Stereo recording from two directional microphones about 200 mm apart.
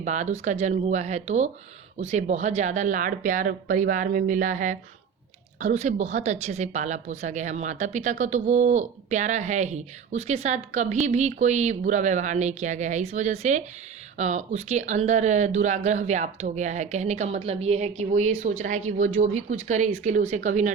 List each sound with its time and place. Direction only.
0.0 s a woman's voice: 35° right (ahead or behind)